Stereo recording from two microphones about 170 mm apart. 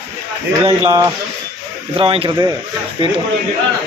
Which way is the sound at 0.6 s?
20° right (ahead or behind).